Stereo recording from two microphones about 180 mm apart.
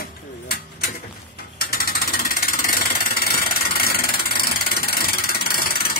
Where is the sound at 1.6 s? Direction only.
60° left (ahead or behind).